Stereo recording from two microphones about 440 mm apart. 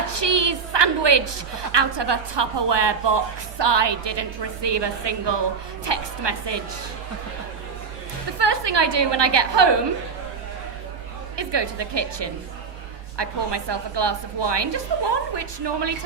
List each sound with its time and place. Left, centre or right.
0.1 s a sound: right
1.7 s a woman's voice: right
8.4 s a woman's voice: right
11.3 s a woman's voice: right